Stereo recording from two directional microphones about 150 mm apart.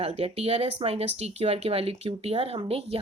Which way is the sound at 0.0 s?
45° right (ahead or behind).